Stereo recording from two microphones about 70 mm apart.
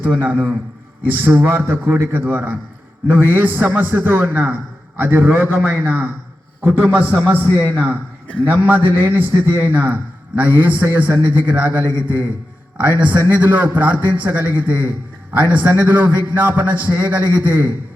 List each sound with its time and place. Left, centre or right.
0.2 s a man's voice: right